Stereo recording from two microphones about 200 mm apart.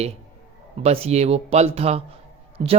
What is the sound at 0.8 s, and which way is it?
A man's voice, 30° right (ahead or behind).